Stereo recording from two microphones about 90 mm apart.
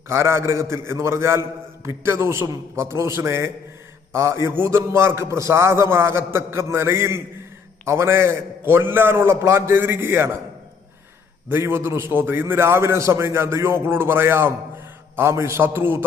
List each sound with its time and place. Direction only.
0.1 s a man's voice: 30° right (ahead or behind)
11.5 s a man's voice: 25° right (ahead or behind)